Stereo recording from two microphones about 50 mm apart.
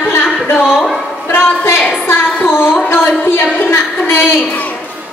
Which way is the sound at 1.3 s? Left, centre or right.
Left.